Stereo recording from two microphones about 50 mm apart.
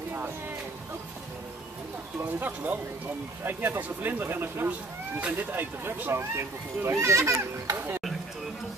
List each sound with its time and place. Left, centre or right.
2.4 s speech: right
5.2 s speech: right
5.6 s speech: right
6.3 s speech: right
7.7 s speech: right